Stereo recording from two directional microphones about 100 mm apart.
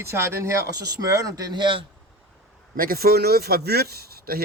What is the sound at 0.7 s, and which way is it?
Speech, 40° right (ahead or behind).